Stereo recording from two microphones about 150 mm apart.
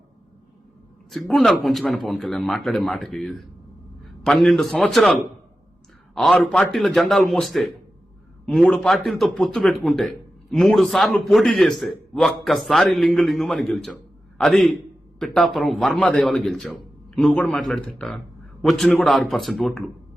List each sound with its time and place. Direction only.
1.3 s a man's voice: centre (ahead or behind)
6.1 s speech: centre (ahead or behind)